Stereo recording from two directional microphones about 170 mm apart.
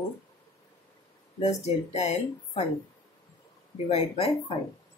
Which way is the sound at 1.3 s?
35° left (ahead or behind).